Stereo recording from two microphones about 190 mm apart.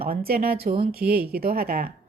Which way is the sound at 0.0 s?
55° right (ahead or behind).